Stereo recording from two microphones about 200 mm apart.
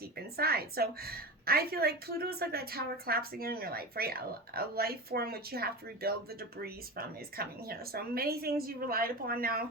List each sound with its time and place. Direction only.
0.3 s a woman's voice: 50° right (ahead or behind)